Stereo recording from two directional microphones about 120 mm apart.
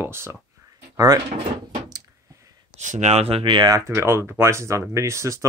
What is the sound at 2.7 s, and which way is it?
Speech, 80° right.